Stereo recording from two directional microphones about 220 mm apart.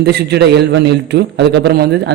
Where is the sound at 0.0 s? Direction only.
50° right (ahead or behind).